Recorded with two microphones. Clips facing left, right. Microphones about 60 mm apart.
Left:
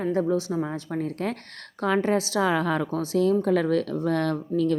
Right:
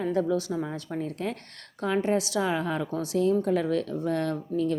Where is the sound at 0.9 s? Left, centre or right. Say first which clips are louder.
Left 3 dB; left.